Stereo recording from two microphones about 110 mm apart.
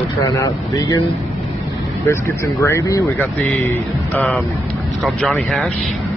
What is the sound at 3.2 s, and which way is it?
Speech, 15° left (ahead or behind).